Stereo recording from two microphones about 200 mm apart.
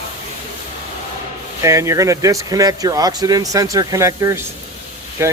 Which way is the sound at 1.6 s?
15° right (ahead or behind).